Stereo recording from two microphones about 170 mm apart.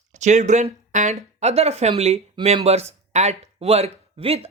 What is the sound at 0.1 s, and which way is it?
Speech, 45° right (ahead or behind).